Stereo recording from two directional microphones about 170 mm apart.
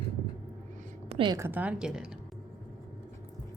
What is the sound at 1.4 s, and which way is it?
Speech, 10° right (ahead or behind).